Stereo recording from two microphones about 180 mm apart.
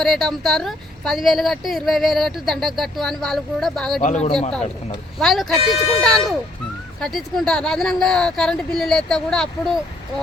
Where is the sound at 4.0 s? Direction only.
40° left (ahead or behind).